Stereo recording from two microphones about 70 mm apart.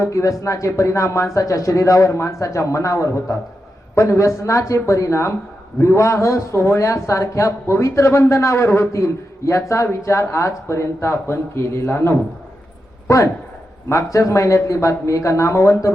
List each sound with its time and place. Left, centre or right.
0.0 s speech: left
13.1 s a man's voice: left